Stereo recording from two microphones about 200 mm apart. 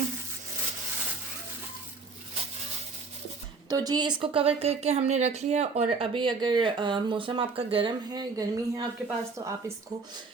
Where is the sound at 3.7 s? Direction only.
20° right (ahead or behind).